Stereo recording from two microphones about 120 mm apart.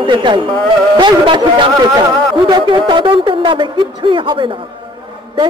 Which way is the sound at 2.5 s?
40° right (ahead or behind).